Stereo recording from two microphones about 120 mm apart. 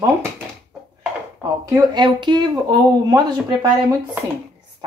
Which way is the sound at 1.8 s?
40° right (ahead or behind).